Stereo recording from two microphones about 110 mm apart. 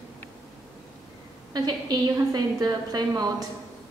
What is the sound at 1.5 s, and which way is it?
A woman's voice, 40° right (ahead or behind).